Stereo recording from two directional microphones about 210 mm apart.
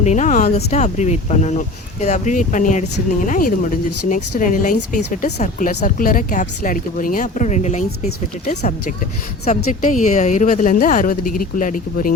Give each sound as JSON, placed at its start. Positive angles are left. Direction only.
{"t": 0.0, "sound": "speech", "side_deg": 35}
{"t": 9.8, "sound": "speech", "side_deg": 35}